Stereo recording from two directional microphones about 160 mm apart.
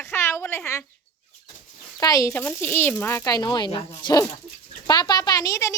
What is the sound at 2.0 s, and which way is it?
Speech, 20° left (ahead or behind).